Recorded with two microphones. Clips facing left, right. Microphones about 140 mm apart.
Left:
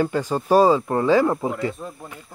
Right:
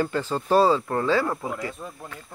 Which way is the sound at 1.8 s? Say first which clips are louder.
Left 3 dB; 5° left (ahead or behind).